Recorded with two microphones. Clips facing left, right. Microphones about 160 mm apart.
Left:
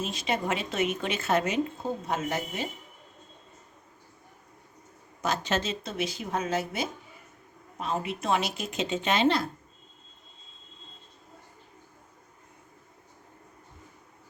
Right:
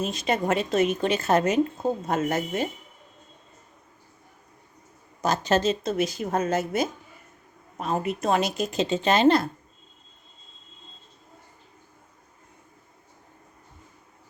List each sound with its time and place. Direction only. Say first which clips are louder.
0.0 s a woman's voice: right 4 dB; 45° right (ahead or behind)
5.2 s speech: right 6 dB; 40° right (ahead or behind)